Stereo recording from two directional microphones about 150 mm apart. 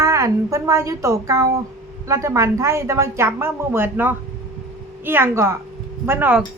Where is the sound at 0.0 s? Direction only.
20° right (ahead or behind).